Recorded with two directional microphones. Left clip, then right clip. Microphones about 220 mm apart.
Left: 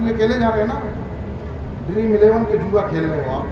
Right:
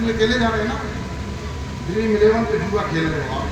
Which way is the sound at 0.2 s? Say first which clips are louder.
Left 1 dB; 15° right (ahead or behind).